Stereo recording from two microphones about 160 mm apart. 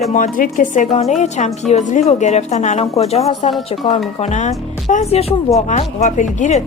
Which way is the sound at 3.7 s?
30° left (ahead or behind).